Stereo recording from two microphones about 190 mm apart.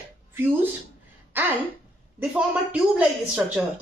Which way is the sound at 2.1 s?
5° right (ahead or behind).